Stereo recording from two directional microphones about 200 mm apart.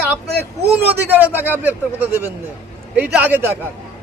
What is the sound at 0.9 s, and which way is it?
Speech, 10° right (ahead or behind).